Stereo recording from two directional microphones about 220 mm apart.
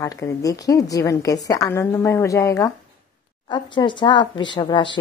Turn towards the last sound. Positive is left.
turn(degrees=20)  # may be behind; listen again after turning